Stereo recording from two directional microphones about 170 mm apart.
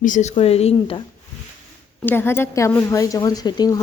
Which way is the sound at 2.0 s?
15° left (ahead or behind).